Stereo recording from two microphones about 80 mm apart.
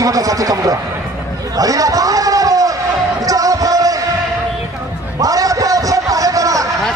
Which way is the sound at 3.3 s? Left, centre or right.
Right.